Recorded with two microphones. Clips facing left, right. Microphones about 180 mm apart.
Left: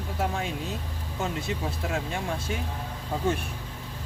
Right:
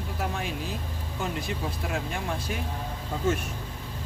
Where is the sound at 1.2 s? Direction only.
25° left (ahead or behind).